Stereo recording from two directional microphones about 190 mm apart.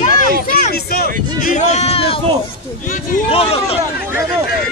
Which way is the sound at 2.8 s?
45° left (ahead or behind).